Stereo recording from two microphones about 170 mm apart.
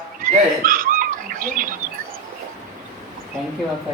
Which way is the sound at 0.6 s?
55° right (ahead or behind).